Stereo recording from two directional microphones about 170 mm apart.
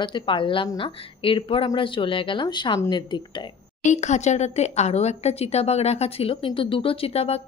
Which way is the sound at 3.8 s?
45° left (ahead or behind).